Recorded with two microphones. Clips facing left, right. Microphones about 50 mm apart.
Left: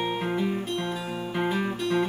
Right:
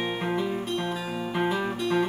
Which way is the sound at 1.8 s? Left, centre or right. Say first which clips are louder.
Right 1 dB; centre.